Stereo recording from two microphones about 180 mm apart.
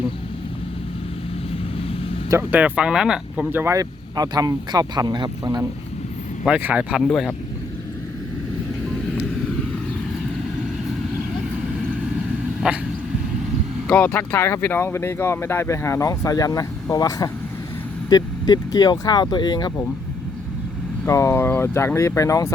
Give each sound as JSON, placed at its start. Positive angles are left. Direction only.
{"t": 2.3, "sound": "speech", "side_deg": -10}
{"t": 6.4, "sound": "speech", "side_deg": -10}
{"t": 12.5, "sound": "a sound", "side_deg": -5}
{"t": 13.8, "sound": "speech", "side_deg": 5}
{"t": 21.0, "sound": "speech", "side_deg": 15}